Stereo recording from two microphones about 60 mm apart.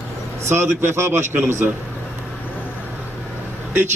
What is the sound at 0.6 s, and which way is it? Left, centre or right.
A man's voice, right.